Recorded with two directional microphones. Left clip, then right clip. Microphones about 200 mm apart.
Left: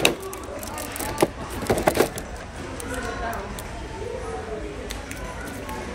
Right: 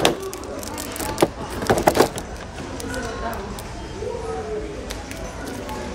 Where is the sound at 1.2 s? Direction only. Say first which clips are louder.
Right 3 dB; centre (ahead or behind).